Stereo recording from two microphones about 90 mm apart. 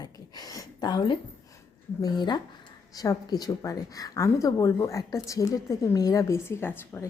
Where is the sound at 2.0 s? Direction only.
55° left (ahead or behind).